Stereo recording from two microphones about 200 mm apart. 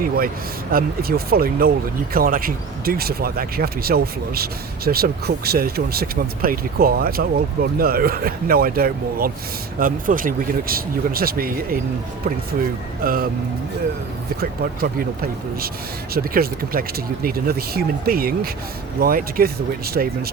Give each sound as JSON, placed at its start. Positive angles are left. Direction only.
{"t": 0.7, "sound": "speech", "side_deg": -45}
{"t": 14.4, "sound": "speech", "side_deg": -50}